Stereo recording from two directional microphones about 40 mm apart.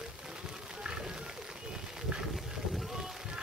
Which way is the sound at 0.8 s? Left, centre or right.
Right.